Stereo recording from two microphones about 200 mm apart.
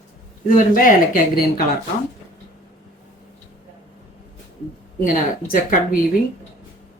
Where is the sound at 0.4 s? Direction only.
45° left (ahead or behind).